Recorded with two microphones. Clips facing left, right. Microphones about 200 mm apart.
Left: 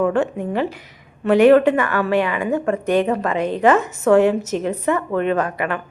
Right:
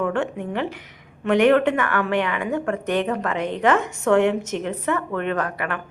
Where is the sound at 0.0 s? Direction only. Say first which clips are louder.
Left 5 dB; 10° left (ahead or behind).